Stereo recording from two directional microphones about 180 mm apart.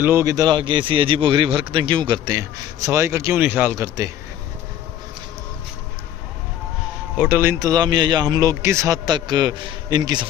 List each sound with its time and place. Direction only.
0.0 s speech: 15° right (ahead or behind)
7.2 s speech: 10° right (ahead or behind)